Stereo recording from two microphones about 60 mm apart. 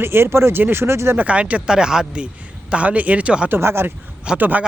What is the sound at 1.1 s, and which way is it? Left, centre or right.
A man's voice, right.